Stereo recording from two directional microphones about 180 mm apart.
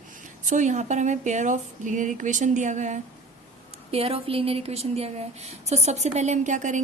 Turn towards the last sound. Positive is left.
turn(degrees=-45)  # may be behind; listen again after turning